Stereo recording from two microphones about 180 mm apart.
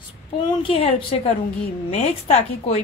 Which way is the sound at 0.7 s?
30° left (ahead or behind).